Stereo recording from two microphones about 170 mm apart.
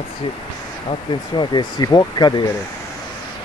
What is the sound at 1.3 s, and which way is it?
Speech, 25° left (ahead or behind).